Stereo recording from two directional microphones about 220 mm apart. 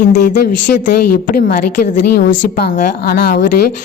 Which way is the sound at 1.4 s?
40° left (ahead or behind).